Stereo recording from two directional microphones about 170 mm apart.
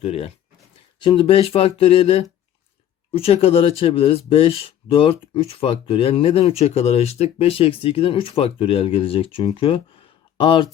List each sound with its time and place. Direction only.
0.0 s speech: 35° left (ahead or behind)